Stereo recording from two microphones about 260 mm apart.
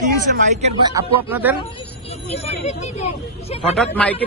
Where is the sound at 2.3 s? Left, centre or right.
Left.